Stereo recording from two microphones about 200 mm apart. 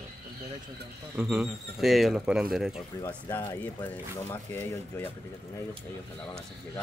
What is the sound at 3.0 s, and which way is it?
Speech, 10° left (ahead or behind).